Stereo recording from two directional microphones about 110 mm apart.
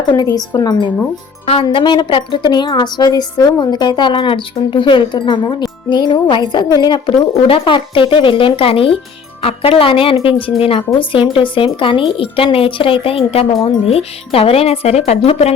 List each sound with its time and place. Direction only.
0.1 s a woman's voice: 35° left (ahead or behind)
7.4 s speech: 55° left (ahead or behind); by 15.5 s 70° left (ahead or behind)